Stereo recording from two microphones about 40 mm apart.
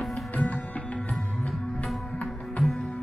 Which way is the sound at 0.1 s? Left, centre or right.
Left.